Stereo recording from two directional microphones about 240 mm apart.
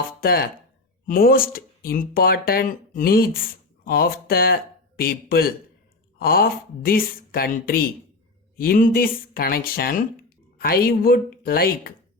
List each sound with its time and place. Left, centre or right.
0.2 s speech: left